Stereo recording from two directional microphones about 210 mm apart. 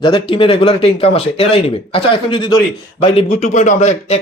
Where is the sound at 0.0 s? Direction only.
25° left (ahead or behind).